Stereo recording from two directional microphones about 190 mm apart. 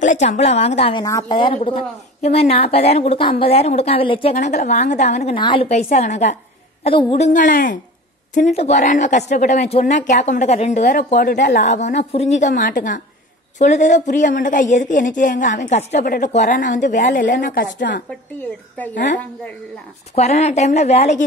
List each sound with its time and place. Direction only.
0.0 s a woman's voice: 40° left (ahead or behind)
1.0 s a woman's voice: 20° left (ahead or behind)
7.2 s a woman's voice: 45° left (ahead or behind)
20.2 s a woman's voice: 35° left (ahead or behind)